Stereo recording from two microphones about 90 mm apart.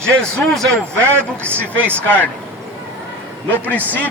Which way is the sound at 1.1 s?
25° right (ahead or behind).